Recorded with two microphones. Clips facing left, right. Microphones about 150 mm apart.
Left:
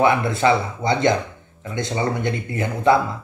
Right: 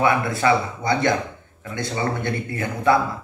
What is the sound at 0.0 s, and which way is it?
Speech, 25° left (ahead or behind).